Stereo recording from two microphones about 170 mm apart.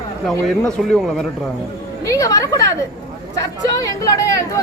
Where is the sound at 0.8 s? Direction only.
Centre (ahead or behind).